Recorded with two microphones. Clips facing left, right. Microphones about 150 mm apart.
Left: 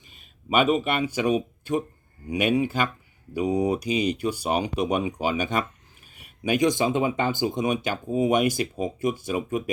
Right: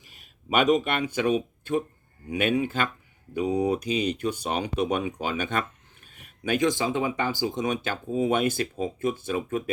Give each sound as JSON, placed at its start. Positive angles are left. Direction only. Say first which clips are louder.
{"t": 0.0, "sound": "speech", "louder": "left 2 dB", "side_deg": 0}